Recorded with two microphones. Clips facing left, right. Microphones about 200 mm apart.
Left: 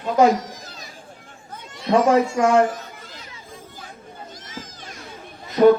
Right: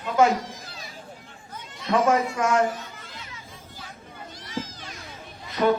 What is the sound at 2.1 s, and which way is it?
Speech, 30° left (ahead or behind).